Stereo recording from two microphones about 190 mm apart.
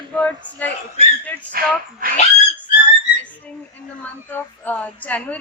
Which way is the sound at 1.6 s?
50° right (ahead or behind).